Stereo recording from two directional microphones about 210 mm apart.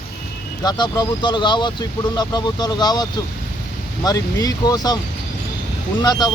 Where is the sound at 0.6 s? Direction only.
20° left (ahead or behind).